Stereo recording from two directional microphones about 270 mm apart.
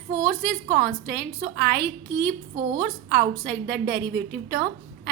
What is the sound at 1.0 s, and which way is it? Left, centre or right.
A woman's voice, right.